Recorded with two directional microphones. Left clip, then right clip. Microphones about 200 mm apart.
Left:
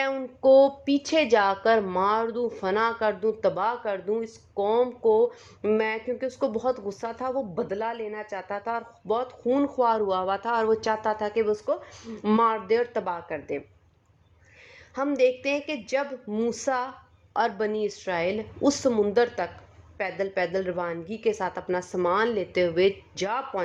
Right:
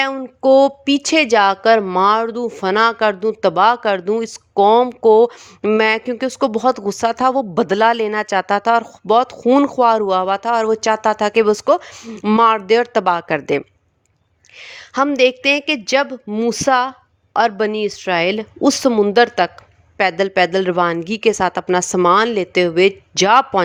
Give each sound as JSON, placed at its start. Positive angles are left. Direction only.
{"t": 0.0, "sound": "speech", "side_deg": -35}
{"t": 12.0, "sound": "speech", "side_deg": -35}